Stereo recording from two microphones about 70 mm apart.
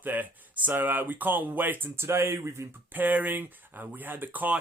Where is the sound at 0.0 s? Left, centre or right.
Right.